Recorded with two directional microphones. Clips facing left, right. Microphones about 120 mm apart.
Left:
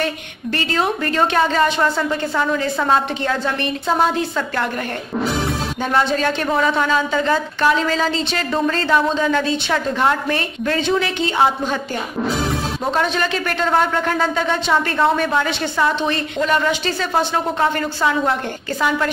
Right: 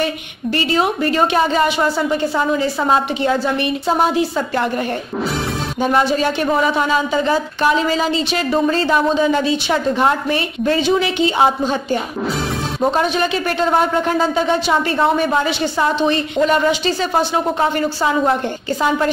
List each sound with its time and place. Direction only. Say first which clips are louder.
0.6 s a woman's voice: right 3 dB; 15° right (ahead or behind)
5.8 s a woman's voice: right 3 dB; 15° right (ahead or behind)